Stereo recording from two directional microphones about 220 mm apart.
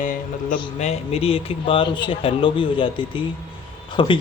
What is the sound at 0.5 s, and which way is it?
A man's voice, 25° left (ahead or behind).